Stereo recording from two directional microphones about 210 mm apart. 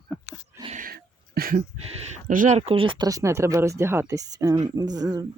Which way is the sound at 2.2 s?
40° right (ahead or behind).